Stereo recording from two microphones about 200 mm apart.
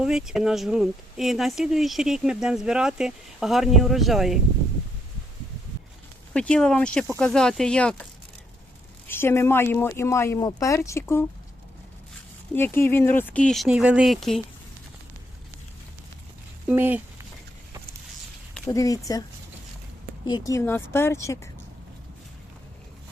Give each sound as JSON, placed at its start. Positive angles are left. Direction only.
{"t": 0.0, "sound": "speech", "side_deg": -5}
{"t": 6.3, "sound": "speech", "side_deg": 5}
{"t": 9.0, "sound": "speech", "side_deg": 10}
{"t": 12.5, "sound": "speech", "side_deg": 10}
{"t": 16.6, "sound": "speech", "side_deg": -10}
{"t": 18.7, "sound": "speech", "side_deg": 15}
{"t": 20.2, "sound": "speech", "side_deg": 20}